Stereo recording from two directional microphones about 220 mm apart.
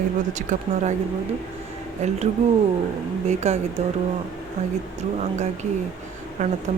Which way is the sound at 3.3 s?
30° right (ahead or behind).